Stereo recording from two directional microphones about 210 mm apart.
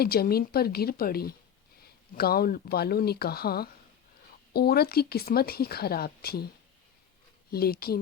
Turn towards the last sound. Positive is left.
turn(degrees=45)  # may be behind; listen again after turning